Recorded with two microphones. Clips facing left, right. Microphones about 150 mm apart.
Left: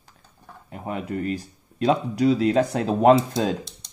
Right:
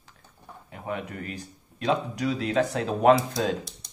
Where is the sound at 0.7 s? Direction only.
35° left (ahead or behind).